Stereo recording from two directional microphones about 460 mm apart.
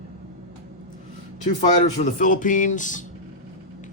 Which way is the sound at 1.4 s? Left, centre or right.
Centre.